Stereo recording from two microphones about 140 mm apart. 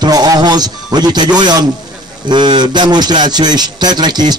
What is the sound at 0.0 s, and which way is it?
A man's voice, 30° right (ahead or behind).